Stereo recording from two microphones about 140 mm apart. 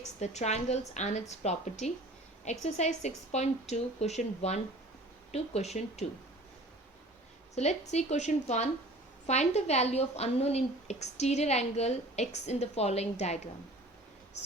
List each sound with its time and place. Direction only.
0.0 s a woman's voice: 55° left (ahead or behind)
7.5 s a woman's voice: 55° left (ahead or behind)